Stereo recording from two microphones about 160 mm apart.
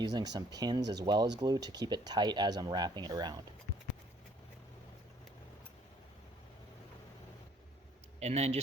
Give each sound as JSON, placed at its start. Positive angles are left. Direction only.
{"t": 0.0, "sound": "speech", "side_deg": -25}
{"t": 8.2, "sound": "speech", "side_deg": -45}